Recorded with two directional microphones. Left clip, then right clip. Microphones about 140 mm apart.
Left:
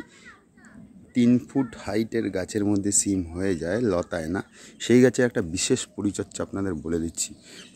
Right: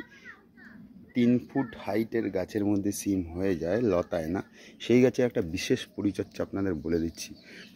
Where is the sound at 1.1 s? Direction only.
35° left (ahead or behind).